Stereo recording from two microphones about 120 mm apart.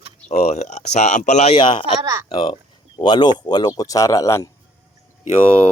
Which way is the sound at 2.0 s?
25° right (ahead or behind).